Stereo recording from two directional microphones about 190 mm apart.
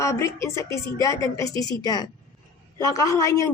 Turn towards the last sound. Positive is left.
turn(degrees=15)  # may be behind; listen again after turning